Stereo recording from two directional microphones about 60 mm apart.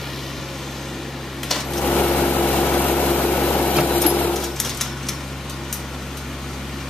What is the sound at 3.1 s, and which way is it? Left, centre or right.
Vehicle, left.